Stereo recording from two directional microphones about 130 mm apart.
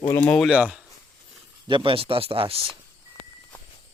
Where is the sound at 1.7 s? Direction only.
40° right (ahead or behind).